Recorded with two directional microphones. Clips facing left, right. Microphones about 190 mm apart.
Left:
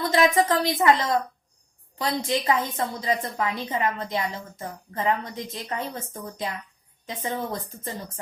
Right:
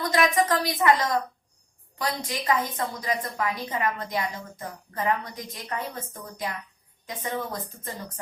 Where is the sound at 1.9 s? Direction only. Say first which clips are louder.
Left 5 dB; 25° left (ahead or behind).